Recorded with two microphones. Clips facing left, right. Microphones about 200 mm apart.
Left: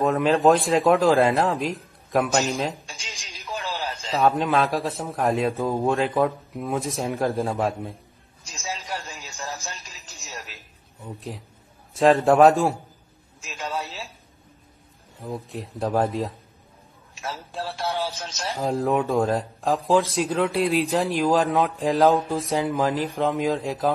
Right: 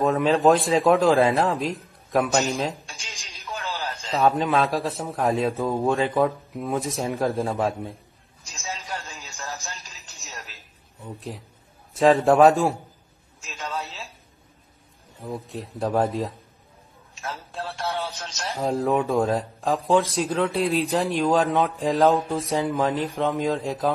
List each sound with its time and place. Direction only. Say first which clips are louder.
0.0 s a man's voice: even; centre (ahead or behind)
3.4 s music: left 1 dB; 15° left (ahead or behind)
4.1 s a man's voice: even; centre (ahead or behind)
8.6 s a sound: left 1 dB; 15° left (ahead or behind)
9.8 s music: left 1 dB; centre (ahead or behind)
10.3 s a sound: left 3 dB; centre (ahead or behind)
11.9 s a man's voice: even; centre (ahead or behind)
13.5 s a sound: left 2 dB; 15° left (ahead or behind)
15.1 s a man's voice: even; centre (ahead or behind)